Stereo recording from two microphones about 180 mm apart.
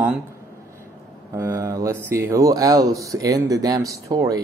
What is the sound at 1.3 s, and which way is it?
Speech, 15° right (ahead or behind).